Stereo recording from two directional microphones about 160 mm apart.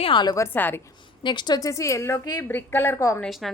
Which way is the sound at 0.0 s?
30° left (ahead or behind).